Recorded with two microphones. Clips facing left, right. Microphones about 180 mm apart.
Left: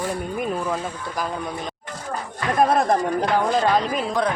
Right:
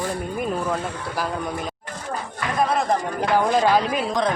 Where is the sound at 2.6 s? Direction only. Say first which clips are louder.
Left 3 dB; 50° left (ahead or behind).